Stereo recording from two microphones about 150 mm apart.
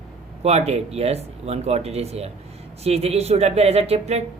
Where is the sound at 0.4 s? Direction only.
45° right (ahead or behind).